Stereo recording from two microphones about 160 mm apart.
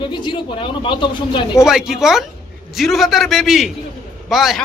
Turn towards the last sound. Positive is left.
turn(degrees=0)  # may be behind; listen again after turning